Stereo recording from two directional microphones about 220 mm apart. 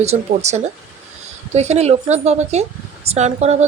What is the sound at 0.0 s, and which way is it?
Speech, 30° right (ahead or behind).